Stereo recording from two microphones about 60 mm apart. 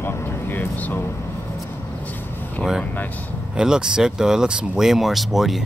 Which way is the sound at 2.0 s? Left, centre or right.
Left.